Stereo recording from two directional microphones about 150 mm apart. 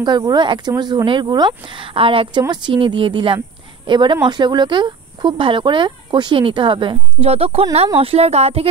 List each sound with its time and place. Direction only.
0.0 s speech: 30° right (ahead or behind); by 8.6 s 45° right (ahead or behind)